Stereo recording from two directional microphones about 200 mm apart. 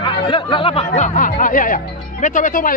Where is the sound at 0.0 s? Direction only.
25° left (ahead or behind).